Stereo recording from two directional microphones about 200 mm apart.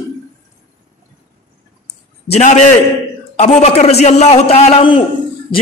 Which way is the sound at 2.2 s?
35° left (ahead or behind).